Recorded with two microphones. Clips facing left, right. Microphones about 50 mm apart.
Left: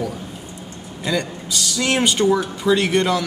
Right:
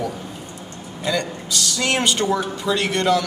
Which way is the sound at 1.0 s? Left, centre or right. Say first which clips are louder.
Even; centre.